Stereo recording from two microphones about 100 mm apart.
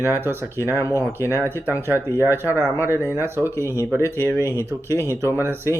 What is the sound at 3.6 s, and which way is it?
Speech, 30° left (ahead or behind).